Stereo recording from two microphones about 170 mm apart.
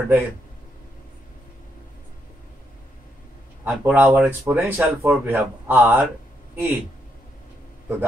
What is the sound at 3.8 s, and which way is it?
A man's voice, 5° right (ahead or behind).